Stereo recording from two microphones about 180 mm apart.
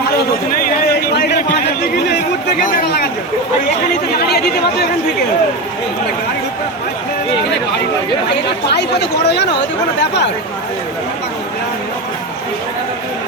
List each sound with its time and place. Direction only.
2.0 s chatter: 55° left (ahead or behind)
4.3 s speech: 60° left (ahead or behind)
8.7 s speech: 70° left (ahead or behind)